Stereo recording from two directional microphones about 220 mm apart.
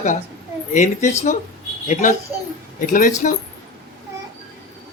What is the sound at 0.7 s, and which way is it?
A woman's voice, 35° left (ahead or behind).